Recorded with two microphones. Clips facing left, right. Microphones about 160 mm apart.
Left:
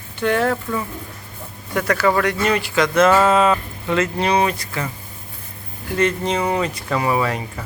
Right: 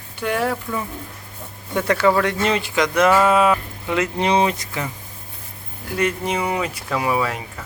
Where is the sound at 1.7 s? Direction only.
25° right (ahead or behind).